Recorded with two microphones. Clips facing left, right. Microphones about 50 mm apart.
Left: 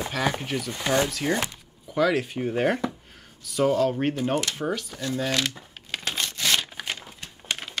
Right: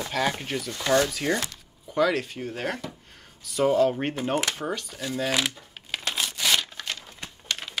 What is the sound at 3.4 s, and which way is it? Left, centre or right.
Speech, centre.